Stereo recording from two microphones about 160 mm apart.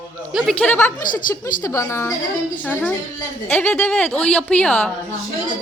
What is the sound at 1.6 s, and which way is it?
A woman's voice, 20° left (ahead or behind).